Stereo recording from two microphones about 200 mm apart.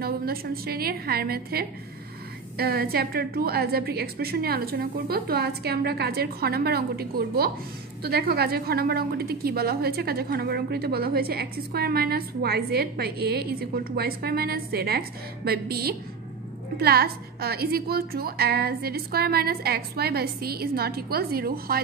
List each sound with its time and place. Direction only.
0.0 s a woman's voice: 50° right (ahead or behind)